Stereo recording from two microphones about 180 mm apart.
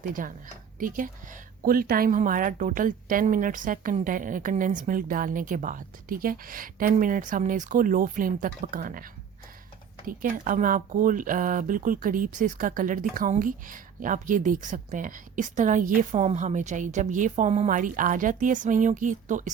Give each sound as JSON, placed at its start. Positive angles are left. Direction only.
{"t": 0.1, "sound": "speech", "side_deg": -50}
{"t": 10.1, "sound": "speech", "side_deg": -50}